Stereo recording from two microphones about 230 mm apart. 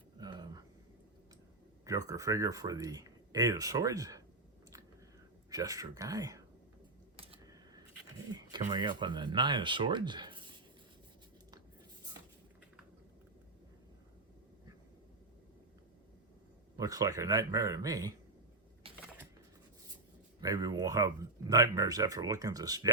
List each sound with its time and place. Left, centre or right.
0.2 s a sound: centre
1.8 s speech: centre
5.5 s speech: centre
7.2 s a sound: right
8.7 s speech: centre
16.7 s speech: centre
20.4 s speech: centre